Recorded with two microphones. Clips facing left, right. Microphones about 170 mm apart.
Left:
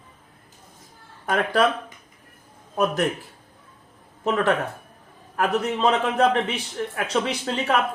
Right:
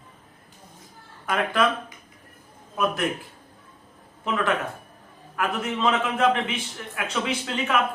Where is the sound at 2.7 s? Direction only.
35° left (ahead or behind).